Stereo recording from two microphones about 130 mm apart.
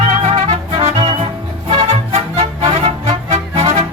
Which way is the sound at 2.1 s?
50° right (ahead or behind).